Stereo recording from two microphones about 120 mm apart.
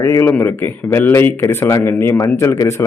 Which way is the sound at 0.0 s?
20° left (ahead or behind).